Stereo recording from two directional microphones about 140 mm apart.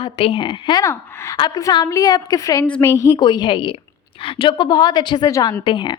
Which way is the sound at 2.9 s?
25° left (ahead or behind).